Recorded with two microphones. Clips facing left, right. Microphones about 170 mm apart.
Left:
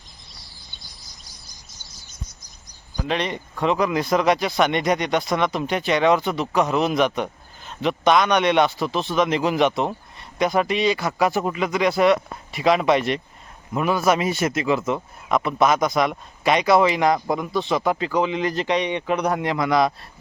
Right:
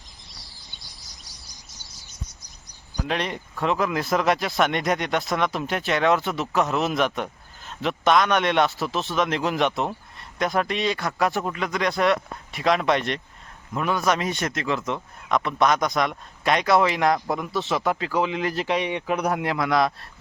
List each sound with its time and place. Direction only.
0.8 s chirp: 75° right (ahead or behind)
3.0 s speech: 5° right (ahead or behind)